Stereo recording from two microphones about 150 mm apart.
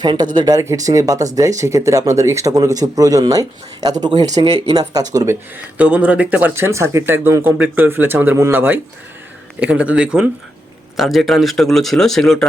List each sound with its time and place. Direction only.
0.0 s speech: 30° right (ahead or behind)
4.4 s speech: 40° right (ahead or behind)
4.7 s speech: 25° right (ahead or behind); by 12.5 s centre (ahead or behind)